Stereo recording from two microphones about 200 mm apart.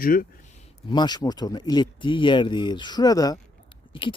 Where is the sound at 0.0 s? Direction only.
45° left (ahead or behind).